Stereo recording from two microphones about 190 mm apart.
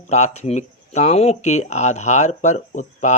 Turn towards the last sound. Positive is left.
turn(degrees=40)  # may be behind; listen again after turning